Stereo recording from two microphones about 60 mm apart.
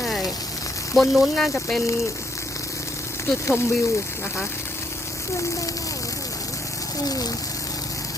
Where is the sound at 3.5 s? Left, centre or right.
Left.